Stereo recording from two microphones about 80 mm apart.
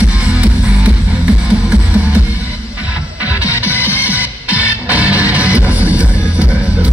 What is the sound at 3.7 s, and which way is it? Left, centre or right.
Music, left.